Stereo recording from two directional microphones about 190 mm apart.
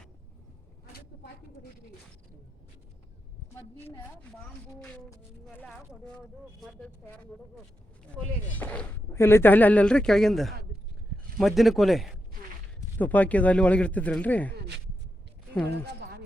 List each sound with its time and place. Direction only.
4.8 s speech: 10° left (ahead or behind)
8.5 s speech: 10° left (ahead or behind)
15.7 s speech: 60° right (ahead or behind)